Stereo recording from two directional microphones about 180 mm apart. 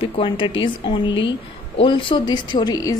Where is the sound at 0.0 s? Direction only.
30° left (ahead or behind).